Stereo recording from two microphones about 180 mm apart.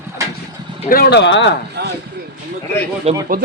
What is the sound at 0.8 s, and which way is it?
Speech, 55° left (ahead or behind).